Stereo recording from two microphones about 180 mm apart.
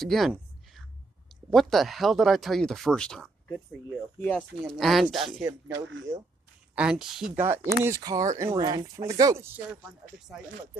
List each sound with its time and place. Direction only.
0.0 s a sound: centre (ahead or behind)
1.5 s speech: centre (ahead or behind)
4.4 s speech: centre (ahead or behind)
5.7 s speech: 90° right
6.7 s speech: 5° right (ahead or behind)
7.4 s speech: 15° right (ahead or behind)
10.2 s speech: 5° right (ahead or behind)